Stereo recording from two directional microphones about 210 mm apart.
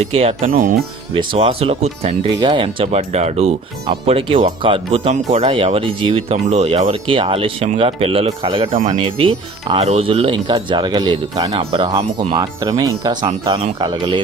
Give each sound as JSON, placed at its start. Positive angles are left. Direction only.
{"t": 0.2, "sound": "speech", "side_deg": -30}
{"t": 1.1, "sound": "speech", "side_deg": -25}
{"t": 8.7, "sound": "speech", "side_deg": -35}